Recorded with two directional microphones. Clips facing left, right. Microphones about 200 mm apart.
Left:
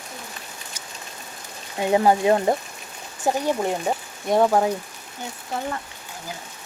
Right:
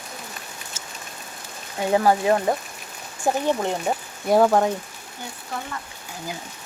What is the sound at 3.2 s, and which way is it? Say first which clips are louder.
Speech: even; 10° left (ahead or behind).